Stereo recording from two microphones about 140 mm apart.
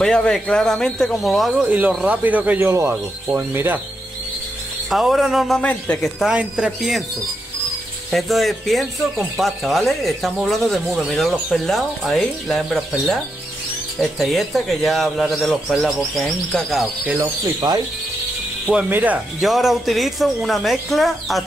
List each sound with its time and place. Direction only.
0.0 s speech: 5° left (ahead or behind); by 3.8 s 15° right (ahead or behind)
4.8 s speech: centre (ahead or behind)
8.1 s speech: centre (ahead or behind)
18.7 s speech: 10° right (ahead or behind)
19.4 s speech: centre (ahead or behind)